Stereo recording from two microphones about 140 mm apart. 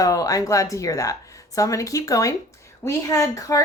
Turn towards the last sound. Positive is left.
turn(degrees=25)  # may be behind; listen again after turning